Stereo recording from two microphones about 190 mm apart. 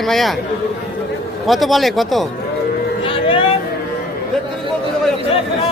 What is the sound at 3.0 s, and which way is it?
Vehicle, 25° left (ahead or behind).